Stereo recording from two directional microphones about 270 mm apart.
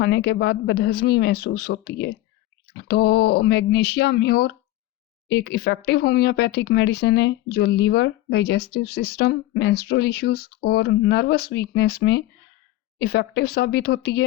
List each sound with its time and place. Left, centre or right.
0.0 s speech: left